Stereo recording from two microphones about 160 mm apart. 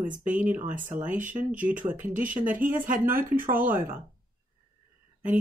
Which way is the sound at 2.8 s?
60° right (ahead or behind).